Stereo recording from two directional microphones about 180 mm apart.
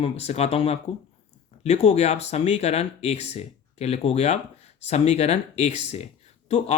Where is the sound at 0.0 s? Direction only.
35° left (ahead or behind).